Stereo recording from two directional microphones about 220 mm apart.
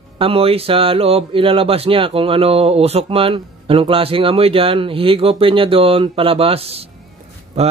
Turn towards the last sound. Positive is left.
turn(degrees=-30)  # may be behind; listen again after turning